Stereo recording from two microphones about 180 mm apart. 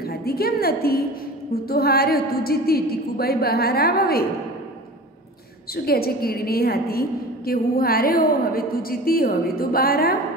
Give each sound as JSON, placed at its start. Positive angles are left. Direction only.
{"t": 0.0, "sound": "a woman's voice", "side_deg": 60}
{"t": 5.9, "sound": "a woman's voice", "side_deg": 60}